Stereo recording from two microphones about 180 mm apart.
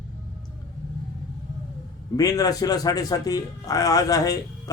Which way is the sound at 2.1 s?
20° left (ahead or behind).